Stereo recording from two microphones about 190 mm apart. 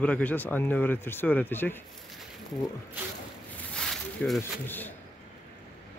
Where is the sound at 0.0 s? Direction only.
10° left (ahead or behind).